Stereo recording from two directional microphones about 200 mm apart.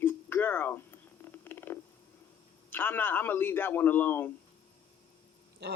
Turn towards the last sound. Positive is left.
turn(degrees=-55)  # may be behind; listen again after turning